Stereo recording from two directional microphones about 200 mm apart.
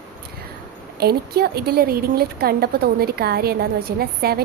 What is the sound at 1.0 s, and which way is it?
A woman's voice, 50° right (ahead or behind).